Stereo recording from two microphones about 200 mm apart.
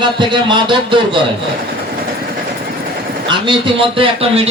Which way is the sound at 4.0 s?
30° right (ahead or behind).